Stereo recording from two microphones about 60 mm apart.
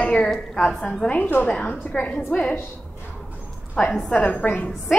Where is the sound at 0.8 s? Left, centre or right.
Centre.